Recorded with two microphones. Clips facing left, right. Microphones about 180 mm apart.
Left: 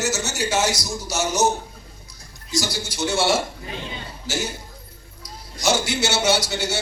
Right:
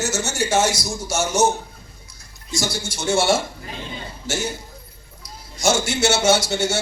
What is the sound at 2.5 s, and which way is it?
Speech, 25° right (ahead or behind).